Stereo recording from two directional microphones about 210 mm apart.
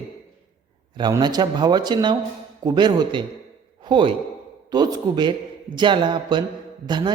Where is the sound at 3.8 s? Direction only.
20° right (ahead or behind).